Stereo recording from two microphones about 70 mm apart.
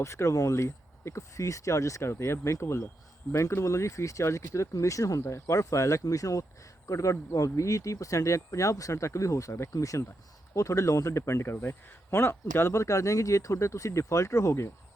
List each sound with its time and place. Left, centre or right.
0.0 s speech: left